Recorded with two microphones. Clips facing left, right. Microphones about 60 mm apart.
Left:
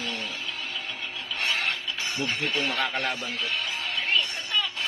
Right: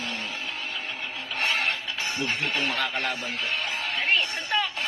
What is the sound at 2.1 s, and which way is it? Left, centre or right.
Speech, right.